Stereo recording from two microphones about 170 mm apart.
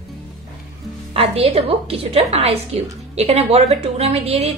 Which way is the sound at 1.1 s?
35° right (ahead or behind).